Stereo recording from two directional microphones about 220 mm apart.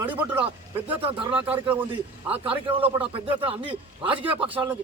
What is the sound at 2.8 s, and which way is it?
Speech, 25° right (ahead or behind).